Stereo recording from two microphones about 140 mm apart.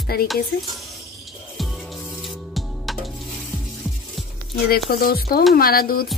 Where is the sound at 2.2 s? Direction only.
Centre (ahead or behind).